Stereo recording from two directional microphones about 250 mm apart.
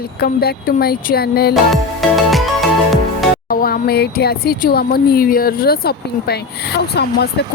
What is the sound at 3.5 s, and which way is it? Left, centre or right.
Speech, left.